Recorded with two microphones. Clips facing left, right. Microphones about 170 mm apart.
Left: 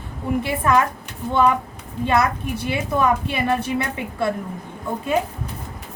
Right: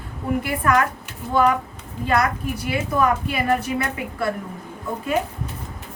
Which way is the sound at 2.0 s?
25° left (ahead or behind).